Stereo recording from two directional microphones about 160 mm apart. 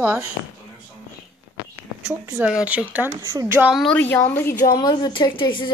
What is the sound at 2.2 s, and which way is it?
Speech, 10° right (ahead or behind).